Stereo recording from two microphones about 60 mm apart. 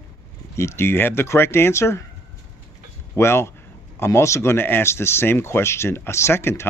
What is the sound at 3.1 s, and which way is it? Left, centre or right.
Speech, left.